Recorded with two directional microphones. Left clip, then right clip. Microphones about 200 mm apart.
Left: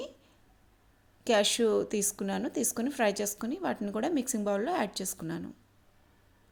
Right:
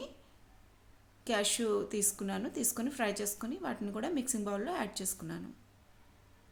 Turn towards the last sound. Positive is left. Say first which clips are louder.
# left 5 dB
turn(degrees=30)  # may be behind; listen again after turning